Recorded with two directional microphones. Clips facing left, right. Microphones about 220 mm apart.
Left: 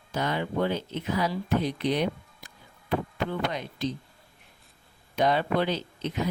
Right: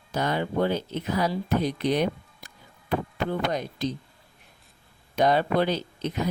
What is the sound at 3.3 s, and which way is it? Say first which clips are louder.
Speech: right 3 dB; 40° right (ahead or behind).